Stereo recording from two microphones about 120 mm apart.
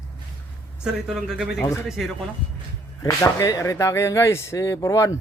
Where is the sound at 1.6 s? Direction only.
20° left (ahead or behind).